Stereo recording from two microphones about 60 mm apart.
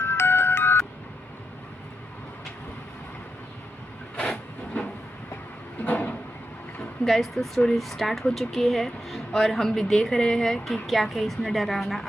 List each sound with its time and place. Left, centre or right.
0.0 s music: left
4.2 s train: centre
5.8 s a sound: left
7.0 s a woman's voice: centre